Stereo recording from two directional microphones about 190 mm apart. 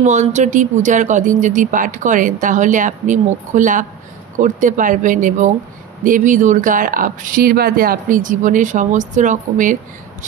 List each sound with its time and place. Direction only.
0.0 s speech: 40° right (ahead or behind)